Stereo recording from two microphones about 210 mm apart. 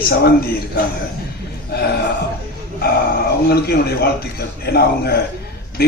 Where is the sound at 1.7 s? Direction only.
50° left (ahead or behind).